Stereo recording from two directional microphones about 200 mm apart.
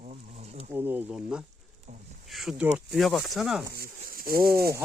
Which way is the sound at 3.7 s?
45° right (ahead or behind).